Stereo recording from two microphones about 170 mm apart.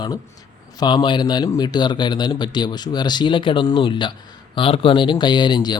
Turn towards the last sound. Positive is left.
turn(degrees=25)  # may be behind; listen again after turning